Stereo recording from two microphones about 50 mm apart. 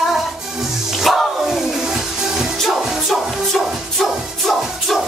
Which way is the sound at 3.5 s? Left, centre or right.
Centre.